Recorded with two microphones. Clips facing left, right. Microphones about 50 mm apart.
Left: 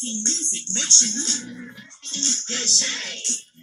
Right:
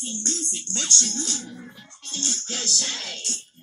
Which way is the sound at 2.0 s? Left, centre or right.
Centre.